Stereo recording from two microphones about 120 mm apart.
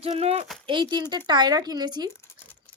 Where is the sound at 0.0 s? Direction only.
60° right (ahead or behind).